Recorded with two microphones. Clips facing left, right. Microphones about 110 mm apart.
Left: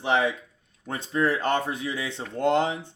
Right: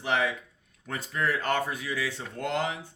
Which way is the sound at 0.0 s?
25° left (ahead or behind).